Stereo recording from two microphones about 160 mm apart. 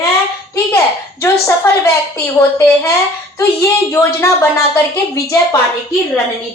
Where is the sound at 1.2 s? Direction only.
15° left (ahead or behind).